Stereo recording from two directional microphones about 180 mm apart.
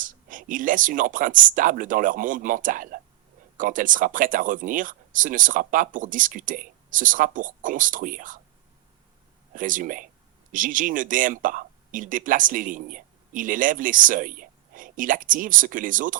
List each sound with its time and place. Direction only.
0.0 s speech: 50° right (ahead or behind)
9.5 s speech: 50° right (ahead or behind)